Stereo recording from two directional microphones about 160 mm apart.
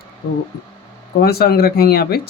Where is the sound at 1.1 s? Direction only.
70° left (ahead or behind).